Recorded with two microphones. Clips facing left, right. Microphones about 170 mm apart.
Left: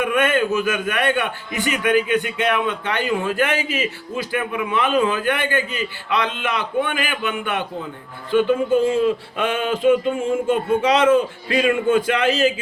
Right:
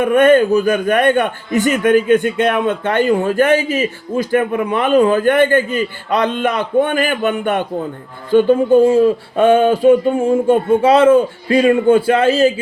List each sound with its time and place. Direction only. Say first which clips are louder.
0.0 s a man's voice: right 9 dB; 40° right (ahead or behind)